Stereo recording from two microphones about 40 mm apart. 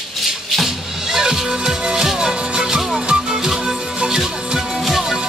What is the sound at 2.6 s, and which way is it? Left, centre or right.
Music, centre.